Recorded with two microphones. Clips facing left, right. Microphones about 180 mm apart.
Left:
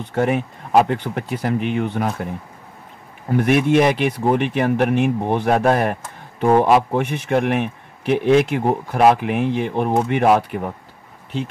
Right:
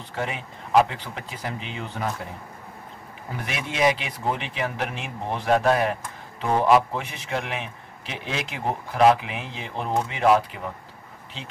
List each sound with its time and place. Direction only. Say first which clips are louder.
0.1 s speech: left 11 dB; 55° left (ahead or behind)
3.3 s speech: left 16 dB; 55° left (ahead or behind)